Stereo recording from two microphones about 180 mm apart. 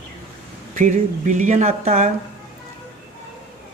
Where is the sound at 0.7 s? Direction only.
40° right (ahead or behind).